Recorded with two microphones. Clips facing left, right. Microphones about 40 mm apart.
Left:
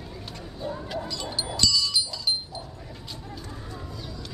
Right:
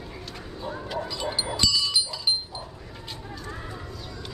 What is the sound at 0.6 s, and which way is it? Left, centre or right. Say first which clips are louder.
Dog: even; centre.